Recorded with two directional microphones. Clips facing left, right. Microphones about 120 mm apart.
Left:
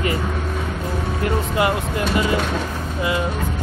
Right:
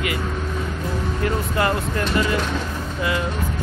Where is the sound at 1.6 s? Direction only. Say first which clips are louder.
Left 1 dB; 15° left (ahead or behind).